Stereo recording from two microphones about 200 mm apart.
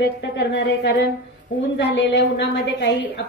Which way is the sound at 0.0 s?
60° left (ahead or behind).